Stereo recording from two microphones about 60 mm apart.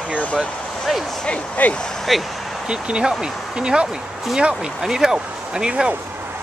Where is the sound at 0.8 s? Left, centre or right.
Centre.